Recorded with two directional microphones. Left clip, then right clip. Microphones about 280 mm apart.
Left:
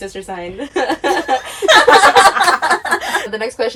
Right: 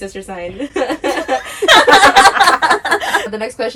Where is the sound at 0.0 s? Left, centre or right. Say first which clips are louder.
Even; centre.